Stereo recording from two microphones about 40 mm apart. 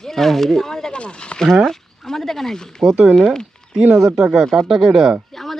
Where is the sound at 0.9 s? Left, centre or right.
Left.